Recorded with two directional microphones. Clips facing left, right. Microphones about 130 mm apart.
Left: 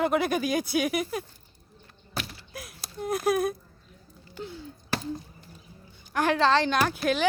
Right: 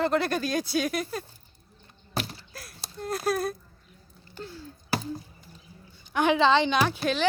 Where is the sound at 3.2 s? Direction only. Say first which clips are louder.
Left 2 dB; 15° left (ahead or behind).